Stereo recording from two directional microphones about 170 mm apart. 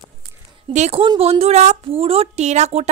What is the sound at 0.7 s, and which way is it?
A woman's voice, 35° right (ahead or behind).